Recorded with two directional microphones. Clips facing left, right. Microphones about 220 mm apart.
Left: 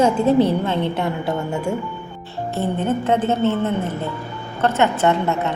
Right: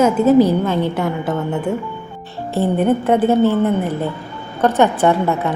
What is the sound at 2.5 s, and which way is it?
A woman's voice, 15° right (ahead or behind).